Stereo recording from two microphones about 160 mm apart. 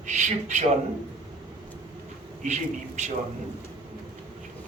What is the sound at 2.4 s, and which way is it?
Speech, 50° right (ahead or behind).